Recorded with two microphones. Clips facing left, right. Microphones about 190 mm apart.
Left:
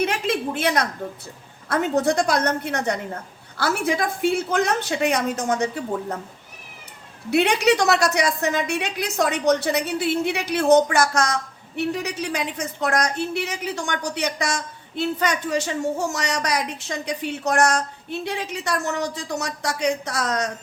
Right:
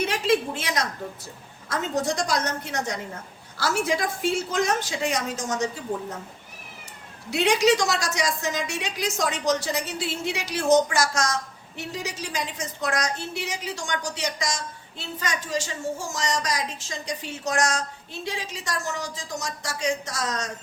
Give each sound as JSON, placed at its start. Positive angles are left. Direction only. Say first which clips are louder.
{"t": 0.0, "sound": "a sound", "louder": "even", "side_deg": 55}
{"t": 1.6, "sound": "a woman's voice", "louder": "left 6 dB", "side_deg": 60}
{"t": 7.3, "sound": "a woman's voice", "louder": "left 2 dB", "side_deg": 60}